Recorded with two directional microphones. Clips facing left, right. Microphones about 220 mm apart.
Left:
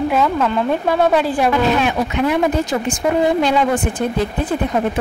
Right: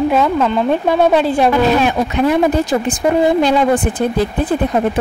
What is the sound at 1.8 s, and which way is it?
Speech, 35° right (ahead or behind).